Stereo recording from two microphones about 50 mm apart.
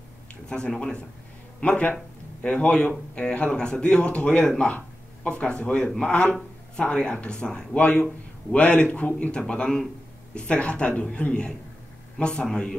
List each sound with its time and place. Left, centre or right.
0.5 s speech: centre
9.5 s speech: centre